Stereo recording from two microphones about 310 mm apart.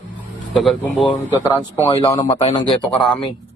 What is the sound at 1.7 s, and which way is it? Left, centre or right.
Speech, centre.